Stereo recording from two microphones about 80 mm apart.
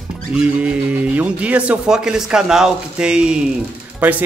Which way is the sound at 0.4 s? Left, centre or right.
Centre.